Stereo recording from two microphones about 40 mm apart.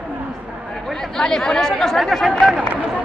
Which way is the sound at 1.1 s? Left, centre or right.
Centre.